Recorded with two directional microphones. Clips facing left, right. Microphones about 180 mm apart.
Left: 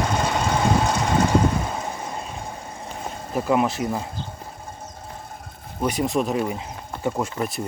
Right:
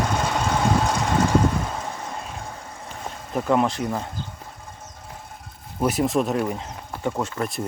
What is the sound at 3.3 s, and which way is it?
Speech, 5° left (ahead or behind).